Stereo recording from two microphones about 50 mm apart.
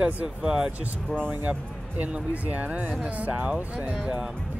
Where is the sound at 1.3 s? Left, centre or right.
Right.